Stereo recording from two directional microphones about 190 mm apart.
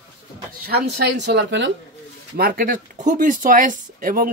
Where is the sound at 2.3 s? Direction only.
50° right (ahead or behind).